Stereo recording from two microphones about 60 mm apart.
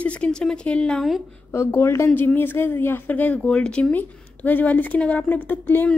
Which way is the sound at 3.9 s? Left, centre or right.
Left.